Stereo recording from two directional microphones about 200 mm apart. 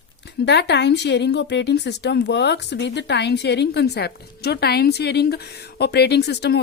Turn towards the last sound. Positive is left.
turn(degrees=55)  # may be behind; listen again after turning